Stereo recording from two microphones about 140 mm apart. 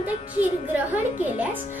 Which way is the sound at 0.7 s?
10° right (ahead or behind).